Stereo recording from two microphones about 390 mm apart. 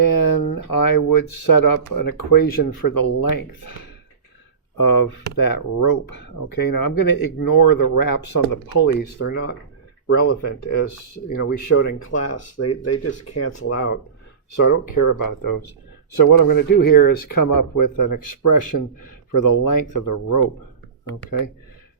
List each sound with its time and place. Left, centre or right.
0.1 s a sound: left
1.9 s speech: left
8.8 s speech: left